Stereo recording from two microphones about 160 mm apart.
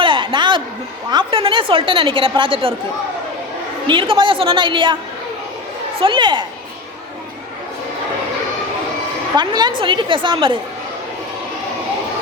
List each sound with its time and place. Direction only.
0.0 s a sound: 30° right (ahead or behind)
1.1 s a woman's voice: 35° right (ahead or behind)
3.8 s a woman's voice: 30° right (ahead or behind)
6.0 s speech: 30° right (ahead or behind)
9.3 s a woman's voice: 25° right (ahead or behind)